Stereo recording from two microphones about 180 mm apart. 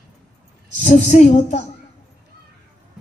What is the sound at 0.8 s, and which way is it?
Speech, 40° left (ahead or behind).